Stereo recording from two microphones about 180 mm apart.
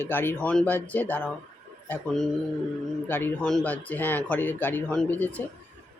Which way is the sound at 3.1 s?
10° left (ahead or behind).